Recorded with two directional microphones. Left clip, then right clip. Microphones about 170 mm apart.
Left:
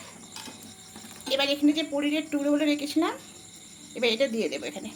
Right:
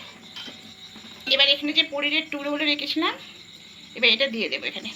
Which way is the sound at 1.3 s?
55° left (ahead or behind).